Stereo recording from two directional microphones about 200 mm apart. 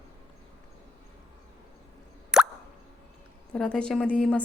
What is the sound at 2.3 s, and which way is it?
Plop, 5° right (ahead or behind).